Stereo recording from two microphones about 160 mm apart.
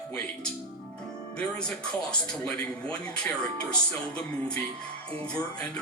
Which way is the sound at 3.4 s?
5° left (ahead or behind).